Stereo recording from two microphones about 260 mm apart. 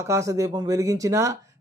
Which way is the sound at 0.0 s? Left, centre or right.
Centre.